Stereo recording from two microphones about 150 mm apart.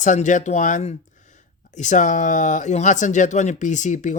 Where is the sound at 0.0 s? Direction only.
55° left (ahead or behind).